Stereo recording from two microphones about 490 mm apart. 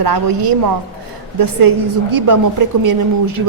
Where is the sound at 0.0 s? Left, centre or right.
Right.